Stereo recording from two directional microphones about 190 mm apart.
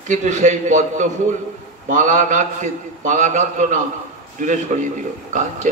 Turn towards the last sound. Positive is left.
turn(degrees=-40)  # may be behind; listen again after turning